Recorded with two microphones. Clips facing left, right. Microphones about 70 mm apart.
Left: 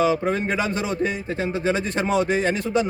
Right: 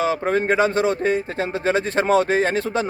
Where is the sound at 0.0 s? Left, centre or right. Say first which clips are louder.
Even; right.